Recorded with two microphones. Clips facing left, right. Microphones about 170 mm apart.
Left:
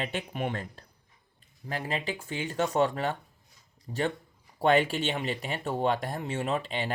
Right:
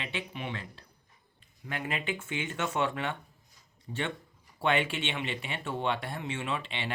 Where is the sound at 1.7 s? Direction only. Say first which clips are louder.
Left 2 dB; 35° left (ahead or behind).